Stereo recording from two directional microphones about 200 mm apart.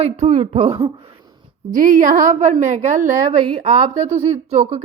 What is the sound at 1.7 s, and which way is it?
A woman's voice, 40° right (ahead or behind).